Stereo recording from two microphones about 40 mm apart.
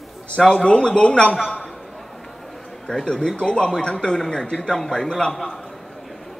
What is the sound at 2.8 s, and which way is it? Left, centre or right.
A man's voice, centre.